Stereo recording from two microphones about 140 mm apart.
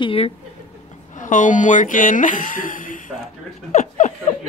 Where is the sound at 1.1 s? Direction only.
65° left (ahead or behind).